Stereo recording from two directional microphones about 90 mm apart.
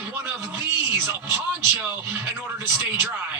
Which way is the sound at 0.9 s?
30° right (ahead or behind).